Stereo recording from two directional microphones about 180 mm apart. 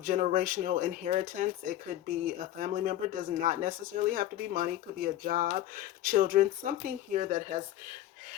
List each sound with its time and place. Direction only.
0.0 s speech: 45° right (ahead or behind)